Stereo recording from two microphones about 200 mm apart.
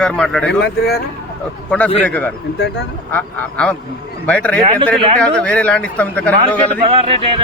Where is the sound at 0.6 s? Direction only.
55° left (ahead or behind).